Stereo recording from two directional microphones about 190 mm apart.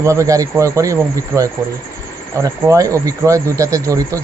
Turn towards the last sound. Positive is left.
turn(degrees=-15)  # may be behind; listen again after turning